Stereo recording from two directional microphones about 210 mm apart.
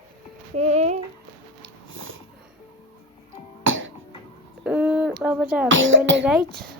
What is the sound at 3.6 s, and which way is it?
Cough, 65° right (ahead or behind).